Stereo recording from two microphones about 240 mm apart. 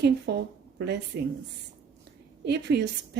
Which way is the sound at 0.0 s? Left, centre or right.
Right.